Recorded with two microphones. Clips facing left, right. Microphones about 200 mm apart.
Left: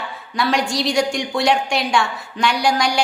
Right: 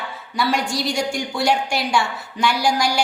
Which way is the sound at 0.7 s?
70° left (ahead or behind).